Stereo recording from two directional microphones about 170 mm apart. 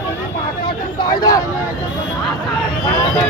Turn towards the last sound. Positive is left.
turn(degrees=20)  # may be behind; listen again after turning